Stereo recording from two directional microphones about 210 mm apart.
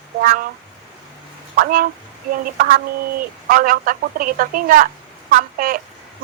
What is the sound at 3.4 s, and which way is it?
A woman's voice, 40° right (ahead or behind).